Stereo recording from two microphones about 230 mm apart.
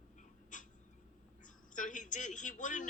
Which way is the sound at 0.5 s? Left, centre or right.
Left.